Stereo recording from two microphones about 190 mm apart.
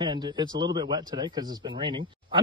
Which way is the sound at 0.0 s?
25° right (ahead or behind).